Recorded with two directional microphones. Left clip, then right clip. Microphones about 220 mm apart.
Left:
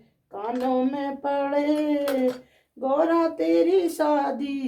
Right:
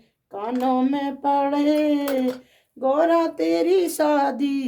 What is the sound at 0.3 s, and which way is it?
Speech, 50° right (ahead or behind).